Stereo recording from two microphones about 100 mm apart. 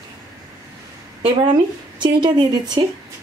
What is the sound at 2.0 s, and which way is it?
Speech, 50° right (ahead or behind).